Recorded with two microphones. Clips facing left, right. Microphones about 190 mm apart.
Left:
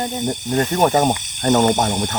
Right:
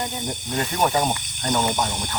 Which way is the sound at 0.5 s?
45° left (ahead or behind).